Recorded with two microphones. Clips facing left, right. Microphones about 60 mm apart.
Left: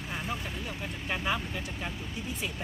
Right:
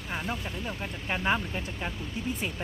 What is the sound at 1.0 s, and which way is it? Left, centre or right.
Speech, right.